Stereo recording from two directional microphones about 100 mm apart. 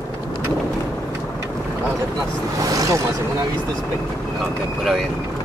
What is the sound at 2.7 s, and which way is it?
Vehicle, 35° right (ahead or behind).